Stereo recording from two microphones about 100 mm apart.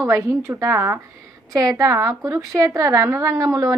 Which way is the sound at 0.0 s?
30° right (ahead or behind).